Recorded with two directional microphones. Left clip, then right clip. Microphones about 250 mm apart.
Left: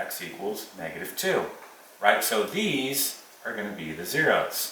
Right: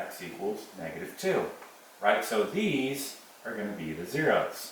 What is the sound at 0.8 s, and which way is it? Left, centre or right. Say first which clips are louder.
Speech: left 3 dB; centre.